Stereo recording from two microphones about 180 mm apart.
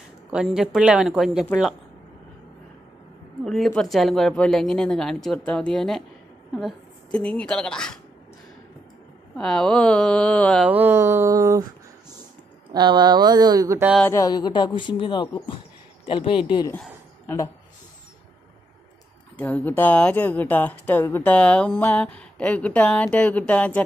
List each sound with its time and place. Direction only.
0.3 s speech: 5° right (ahead or behind)
3.4 s a woman's voice: centre (ahead or behind)
9.4 s speech: 5° left (ahead or behind)
10.6 s speech: 10° right (ahead or behind)
12.7 s speech: 25° right (ahead or behind)
14.0 s speech: 15° left (ahead or behind)
19.3 s speech: 10° left (ahead or behind)